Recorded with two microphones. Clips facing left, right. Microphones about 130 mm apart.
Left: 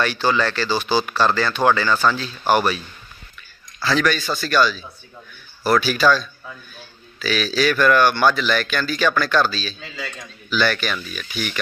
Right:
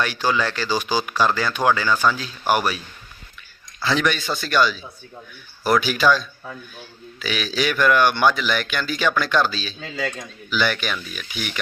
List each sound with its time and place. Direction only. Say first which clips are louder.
0.0 s speech: left 2 dB; 10° right (ahead or behind)
3.8 s speech: left 2 dB; 20° right (ahead or behind)